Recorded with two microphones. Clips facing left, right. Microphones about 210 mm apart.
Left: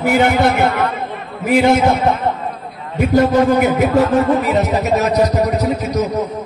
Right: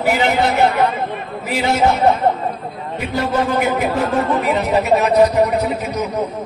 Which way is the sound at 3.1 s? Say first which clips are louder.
Left 6 dB; 45° left (ahead or behind).